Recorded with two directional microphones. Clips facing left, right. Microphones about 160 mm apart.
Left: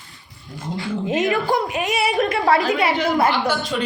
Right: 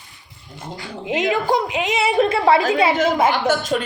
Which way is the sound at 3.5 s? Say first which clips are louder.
Right 3 dB; 45° right (ahead or behind).